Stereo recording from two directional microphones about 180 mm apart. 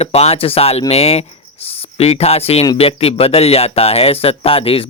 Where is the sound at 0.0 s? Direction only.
35° left (ahead or behind).